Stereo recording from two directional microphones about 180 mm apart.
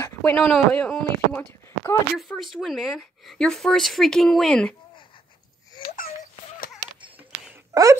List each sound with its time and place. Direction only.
0.0 s a sound: 10° left (ahead or behind)
0.5 s speech: 5° left (ahead or behind)
7.7 s speech: 20° right (ahead or behind)